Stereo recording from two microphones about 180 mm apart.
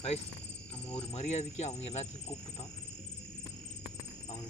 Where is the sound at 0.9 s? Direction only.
35° left (ahead or behind).